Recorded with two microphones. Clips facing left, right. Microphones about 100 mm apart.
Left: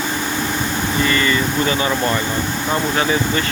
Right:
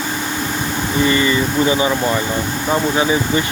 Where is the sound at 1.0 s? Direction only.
20° right (ahead or behind).